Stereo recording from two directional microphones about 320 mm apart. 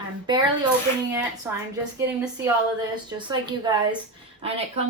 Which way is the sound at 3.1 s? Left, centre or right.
Centre.